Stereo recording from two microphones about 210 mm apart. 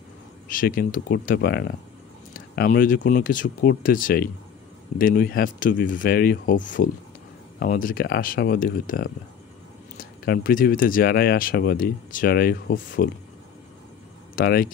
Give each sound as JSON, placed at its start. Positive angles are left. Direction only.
{"t": 0.5, "sound": "speech", "side_deg": 40}
{"t": 14.3, "sound": "speech", "side_deg": 45}